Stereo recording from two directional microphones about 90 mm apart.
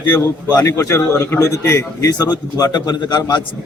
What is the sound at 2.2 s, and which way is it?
A man's voice, 50° left (ahead or behind).